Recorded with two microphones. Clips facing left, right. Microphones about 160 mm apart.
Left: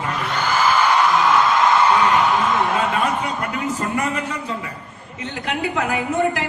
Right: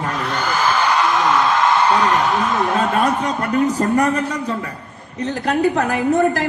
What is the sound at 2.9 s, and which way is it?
A man's voice, 40° right (ahead or behind).